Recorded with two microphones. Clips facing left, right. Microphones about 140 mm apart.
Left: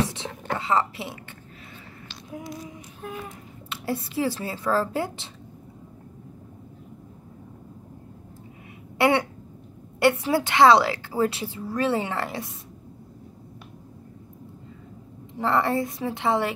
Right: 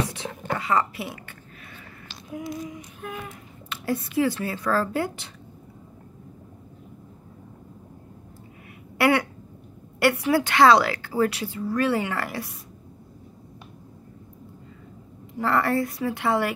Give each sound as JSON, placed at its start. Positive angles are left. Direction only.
{"t": 0.0, "sound": "whispering", "side_deg": 25}
{"t": 3.6, "sound": "a woman's voice", "side_deg": 25}
{"t": 8.9, "sound": "a sound", "side_deg": 20}
{"t": 9.9, "sound": "a woman's voice", "side_deg": 20}
{"t": 15.3, "sound": "a woman's voice", "side_deg": 25}